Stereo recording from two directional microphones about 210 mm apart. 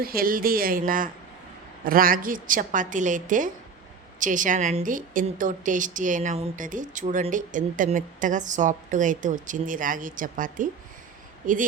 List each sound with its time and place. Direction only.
0.0 s a woman's voice: 45° right (ahead or behind)